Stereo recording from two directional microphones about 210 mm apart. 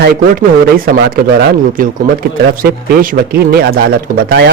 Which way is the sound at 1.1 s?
40° right (ahead or behind).